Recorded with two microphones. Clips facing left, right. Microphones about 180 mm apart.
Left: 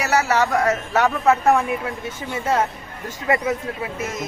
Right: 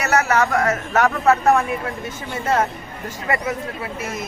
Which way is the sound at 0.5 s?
15° left (ahead or behind).